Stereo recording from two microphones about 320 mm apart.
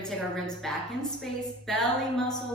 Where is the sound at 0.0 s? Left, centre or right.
Centre.